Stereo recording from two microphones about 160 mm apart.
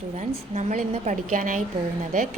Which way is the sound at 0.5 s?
45° right (ahead or behind).